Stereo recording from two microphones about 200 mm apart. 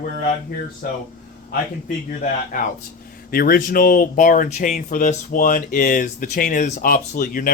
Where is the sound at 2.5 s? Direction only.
45° left (ahead or behind).